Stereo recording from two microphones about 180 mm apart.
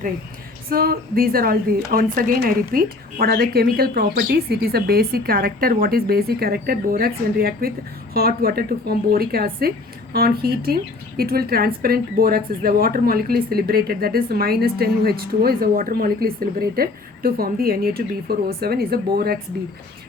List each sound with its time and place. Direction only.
0.7 s a woman's voice: 55° right (ahead or behind)